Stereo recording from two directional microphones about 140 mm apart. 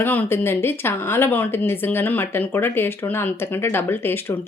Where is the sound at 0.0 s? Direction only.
15° left (ahead or behind).